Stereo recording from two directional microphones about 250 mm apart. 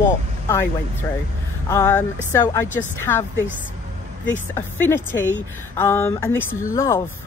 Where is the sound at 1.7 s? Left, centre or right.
Centre.